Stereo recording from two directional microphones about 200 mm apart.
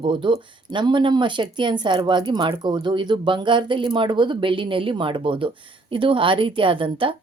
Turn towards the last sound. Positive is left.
turn(degrees=-25)  # may be behind; listen again after turning